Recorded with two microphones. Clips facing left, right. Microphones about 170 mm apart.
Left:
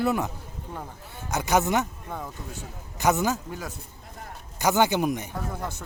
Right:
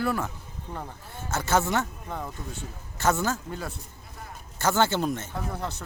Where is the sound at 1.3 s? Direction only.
15° left (ahead or behind).